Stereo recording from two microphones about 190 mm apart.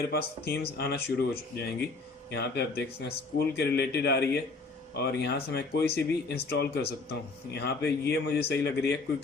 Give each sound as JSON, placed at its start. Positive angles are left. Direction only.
{"t": 0.1, "sound": "speech", "side_deg": 55}